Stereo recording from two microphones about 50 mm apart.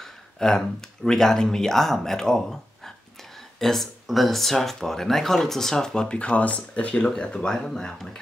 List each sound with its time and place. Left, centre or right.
0.0 s speech: centre
6.0 s speech: left
7.2 s speech: centre